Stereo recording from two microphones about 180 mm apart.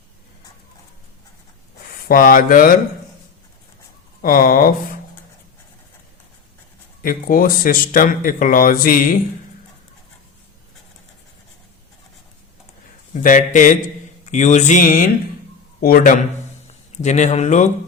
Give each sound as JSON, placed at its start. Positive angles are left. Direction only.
{"t": 2.0, "sound": "speech", "side_deg": 55}
{"t": 4.2, "sound": "speech", "side_deg": 50}
{"t": 7.0, "sound": "speech", "side_deg": 50}
{"t": 13.1, "sound": "speech", "side_deg": 45}
{"t": 14.3, "sound": "a sound", "side_deg": 40}
{"t": 15.8, "sound": "a man's voice", "side_deg": 55}
{"t": 17.0, "sound": "a sound", "side_deg": 40}